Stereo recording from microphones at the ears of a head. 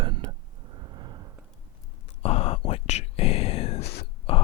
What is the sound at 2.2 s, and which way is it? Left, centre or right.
Whispering, left.